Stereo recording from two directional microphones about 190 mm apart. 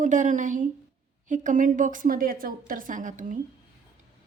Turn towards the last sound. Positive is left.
turn(degrees=-40)  # may be behind; listen again after turning